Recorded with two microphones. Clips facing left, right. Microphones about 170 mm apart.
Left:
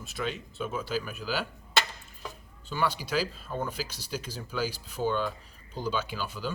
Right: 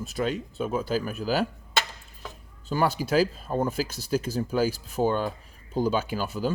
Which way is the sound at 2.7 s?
45° right (ahead or behind).